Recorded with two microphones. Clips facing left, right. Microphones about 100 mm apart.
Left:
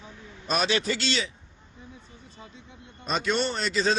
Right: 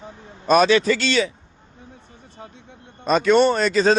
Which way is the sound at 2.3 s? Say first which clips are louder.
Right 7 dB; 55° right (ahead or behind).